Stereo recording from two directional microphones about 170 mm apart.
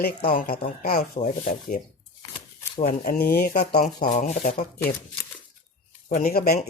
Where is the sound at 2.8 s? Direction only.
55° left (ahead or behind).